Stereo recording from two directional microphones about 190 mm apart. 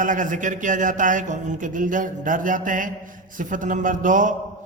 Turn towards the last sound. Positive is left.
turn(degrees=-45)  # may be behind; listen again after turning